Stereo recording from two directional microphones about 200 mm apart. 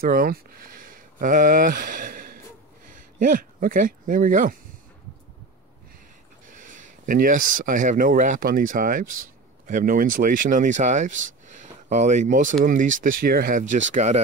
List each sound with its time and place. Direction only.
0.0 s speech: 45° right (ahead or behind)
6.7 s speech: 40° right (ahead or behind)